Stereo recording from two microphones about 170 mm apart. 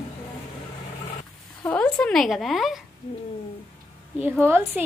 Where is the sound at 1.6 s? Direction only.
10° left (ahead or behind).